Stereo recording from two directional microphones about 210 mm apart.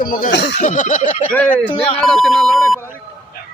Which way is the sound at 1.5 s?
5° left (ahead or behind).